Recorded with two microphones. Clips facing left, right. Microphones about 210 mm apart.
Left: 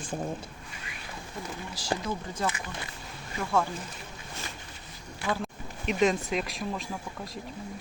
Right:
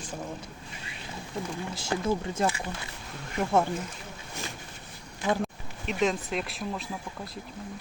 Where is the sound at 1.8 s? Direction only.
25° right (ahead or behind).